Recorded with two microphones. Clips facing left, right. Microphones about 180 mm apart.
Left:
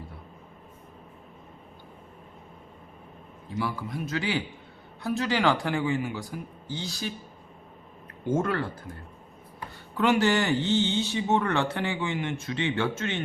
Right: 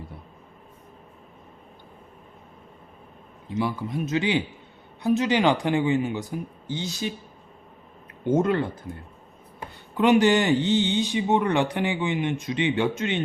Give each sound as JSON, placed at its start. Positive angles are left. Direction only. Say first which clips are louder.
{"t": 3.5, "sound": "speech", "louder": "right 4 dB", "side_deg": -20}
{"t": 8.2, "sound": "speech", "louder": "right 5 dB", "side_deg": -20}